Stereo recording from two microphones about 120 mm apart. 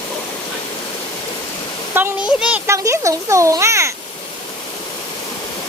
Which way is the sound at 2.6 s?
25° right (ahead or behind).